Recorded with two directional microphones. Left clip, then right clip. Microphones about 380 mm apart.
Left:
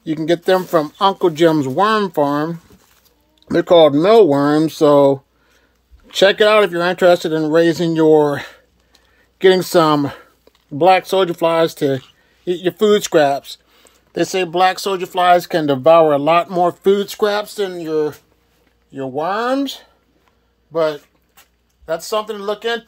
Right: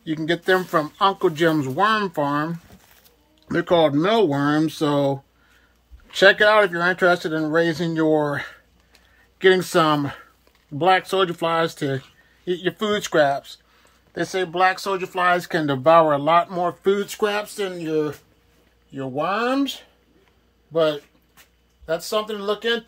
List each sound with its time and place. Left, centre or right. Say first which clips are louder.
0.0 s speech: left 6 dB; centre